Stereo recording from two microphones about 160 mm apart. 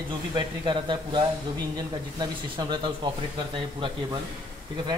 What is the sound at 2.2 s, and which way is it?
Speech, 30° right (ahead or behind).